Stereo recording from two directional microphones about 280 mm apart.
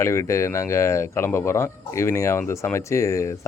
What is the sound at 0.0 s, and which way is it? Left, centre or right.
Speech, centre.